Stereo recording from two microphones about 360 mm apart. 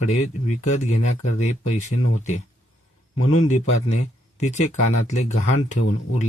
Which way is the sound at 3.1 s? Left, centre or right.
Left.